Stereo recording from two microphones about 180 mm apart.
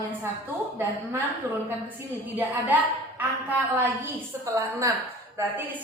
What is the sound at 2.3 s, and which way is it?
Speech, 10° right (ahead or behind).